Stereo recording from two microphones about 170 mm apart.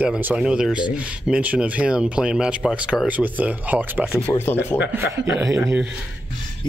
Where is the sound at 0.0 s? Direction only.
10° right (ahead or behind).